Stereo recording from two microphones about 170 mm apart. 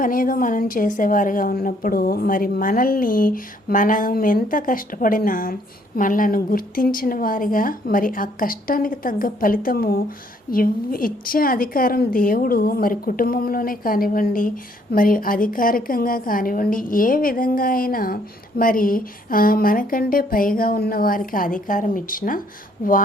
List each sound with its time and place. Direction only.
0.0 s a woman's voice: 55° left (ahead or behind)